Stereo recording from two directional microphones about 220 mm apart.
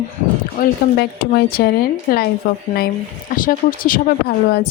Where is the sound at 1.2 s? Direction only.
45° left (ahead or behind).